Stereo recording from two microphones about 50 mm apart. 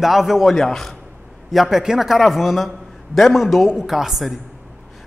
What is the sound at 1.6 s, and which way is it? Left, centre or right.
A man's voice, centre.